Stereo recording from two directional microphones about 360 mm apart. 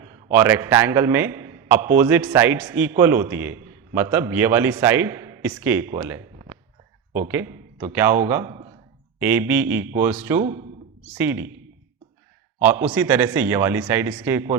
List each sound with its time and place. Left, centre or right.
0.0 s a man's voice: centre
12.5 s speech: centre